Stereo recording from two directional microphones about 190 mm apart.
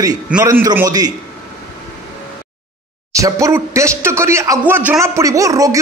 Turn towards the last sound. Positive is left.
turn(degrees=-15)  # may be behind; listen again after turning